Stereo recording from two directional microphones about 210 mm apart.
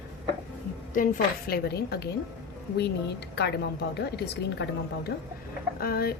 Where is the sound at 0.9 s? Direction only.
45° left (ahead or behind).